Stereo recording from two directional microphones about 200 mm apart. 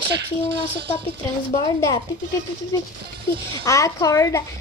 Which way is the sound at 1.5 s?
20° left (ahead or behind).